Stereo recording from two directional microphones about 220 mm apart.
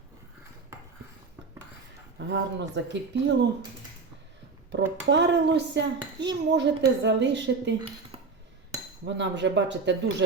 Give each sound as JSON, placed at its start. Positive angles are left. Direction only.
{"t": 2.1, "sound": "a woman's voice", "side_deg": -50}
{"t": 4.7, "sound": "a woman's voice", "side_deg": -55}
{"t": 8.1, "sound": "chink", "side_deg": -25}
{"t": 9.0, "sound": "a woman's voice", "side_deg": -55}